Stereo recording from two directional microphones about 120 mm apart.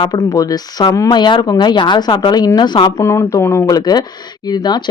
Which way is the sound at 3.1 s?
25° left (ahead or behind).